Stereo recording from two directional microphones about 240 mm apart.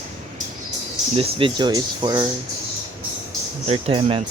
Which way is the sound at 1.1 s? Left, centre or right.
Right.